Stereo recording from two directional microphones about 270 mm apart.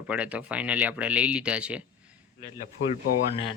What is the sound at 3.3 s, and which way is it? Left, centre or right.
Speech, centre.